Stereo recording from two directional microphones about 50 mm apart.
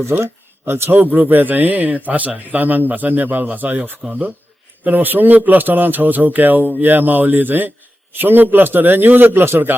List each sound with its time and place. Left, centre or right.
0.0 s a man's voice: right